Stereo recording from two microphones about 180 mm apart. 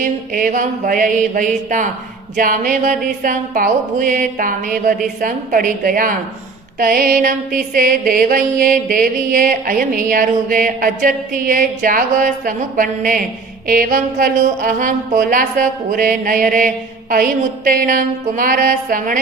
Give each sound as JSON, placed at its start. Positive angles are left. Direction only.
{"t": 0.0, "sound": "music", "side_deg": -45}